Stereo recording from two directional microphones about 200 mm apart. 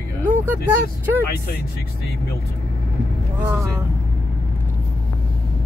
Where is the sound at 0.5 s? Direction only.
10° right (ahead or behind).